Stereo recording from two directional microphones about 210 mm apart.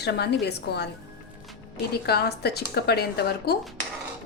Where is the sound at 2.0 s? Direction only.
50° left (ahead or behind).